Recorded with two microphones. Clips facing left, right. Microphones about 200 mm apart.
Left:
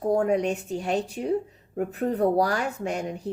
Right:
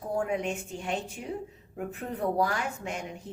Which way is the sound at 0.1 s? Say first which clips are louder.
Left 7 dB; 40° left (ahead or behind).